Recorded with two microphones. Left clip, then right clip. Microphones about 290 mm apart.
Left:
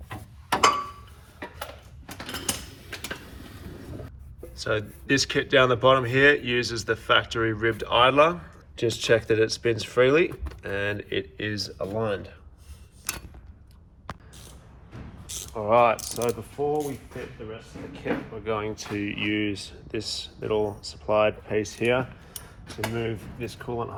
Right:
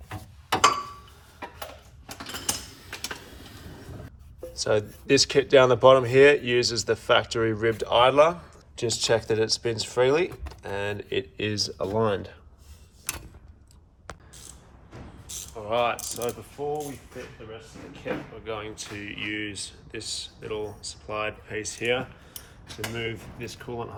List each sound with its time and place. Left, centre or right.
4.6 s speech: centre; by 12.4 s right
15.3 s mechanisms: left
17.9 s speech: left